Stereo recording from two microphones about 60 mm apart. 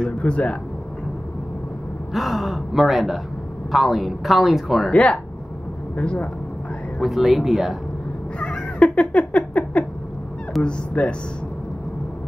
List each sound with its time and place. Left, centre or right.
0.2 s speech: left
2.1 s speech: centre
4.9 s speech: left
7.0 s speech: centre
8.4 s cat: left
10.6 s speech: centre